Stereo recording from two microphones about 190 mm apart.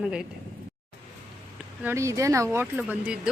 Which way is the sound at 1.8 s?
15° right (ahead or behind).